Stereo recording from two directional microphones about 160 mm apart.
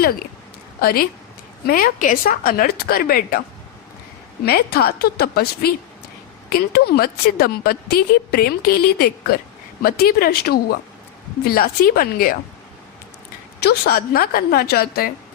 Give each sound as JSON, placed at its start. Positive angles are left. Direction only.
{"t": 0.8, "sound": "a woman's voice", "side_deg": 70}
{"t": 4.4, "sound": "a woman's voice", "side_deg": 80}
{"t": 13.6, "sound": "a woman's voice", "side_deg": 90}